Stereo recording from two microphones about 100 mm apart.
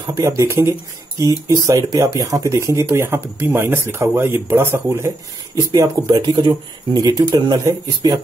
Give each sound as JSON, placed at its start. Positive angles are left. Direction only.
{"t": 0.1, "sound": "speech", "side_deg": -35}
{"t": 5.7, "sound": "speech", "side_deg": -45}